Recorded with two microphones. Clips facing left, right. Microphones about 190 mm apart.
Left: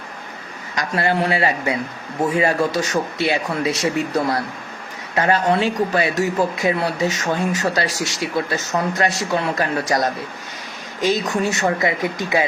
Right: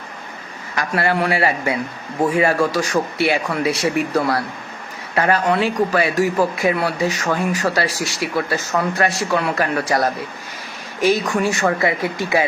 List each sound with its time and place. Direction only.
0.8 s speech: 20° left (ahead or behind)
11.0 s speech: 20° left (ahead or behind)